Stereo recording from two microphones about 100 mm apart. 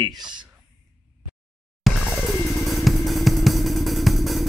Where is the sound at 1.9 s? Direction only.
Centre (ahead or behind).